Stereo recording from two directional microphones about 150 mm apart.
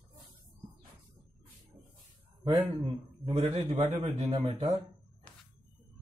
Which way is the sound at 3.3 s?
45° right (ahead or behind).